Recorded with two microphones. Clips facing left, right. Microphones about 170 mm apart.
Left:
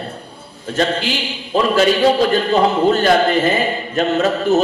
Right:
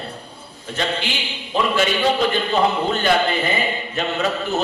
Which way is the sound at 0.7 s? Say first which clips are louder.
Left 6 dB; 40° left (ahead or behind).